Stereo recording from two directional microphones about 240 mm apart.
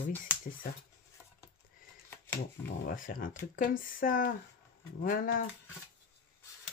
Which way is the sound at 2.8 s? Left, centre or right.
Left.